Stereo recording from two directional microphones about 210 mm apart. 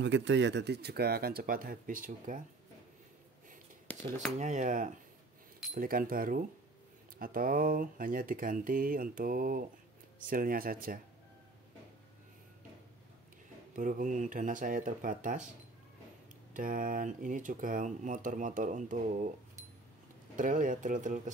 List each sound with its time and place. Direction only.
0.0 s speech: 60° right (ahead or behind); by 2.4 s 40° right (ahead or behind)
3.8 s cutlery: 10° left (ahead or behind)
4.4 s speech: 35° right (ahead or behind)
13.7 s speech: 40° right (ahead or behind)
16.5 s speech: 40° right (ahead or behind)
20.3 s speech: 40° right (ahead or behind)